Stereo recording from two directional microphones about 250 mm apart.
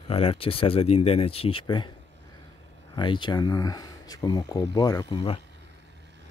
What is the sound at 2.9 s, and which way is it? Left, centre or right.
Speech, centre.